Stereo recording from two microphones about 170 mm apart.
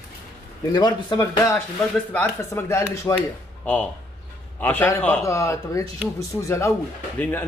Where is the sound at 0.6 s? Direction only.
25° left (ahead or behind).